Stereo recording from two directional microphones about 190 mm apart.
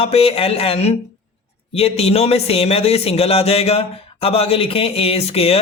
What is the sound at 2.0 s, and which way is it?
Speech, 35° left (ahead or behind).